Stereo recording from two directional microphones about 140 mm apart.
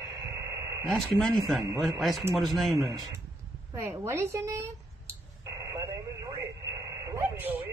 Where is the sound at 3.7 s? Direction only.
20° right (ahead or behind).